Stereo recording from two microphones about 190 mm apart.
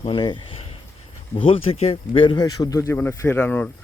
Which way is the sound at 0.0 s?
25° left (ahead or behind).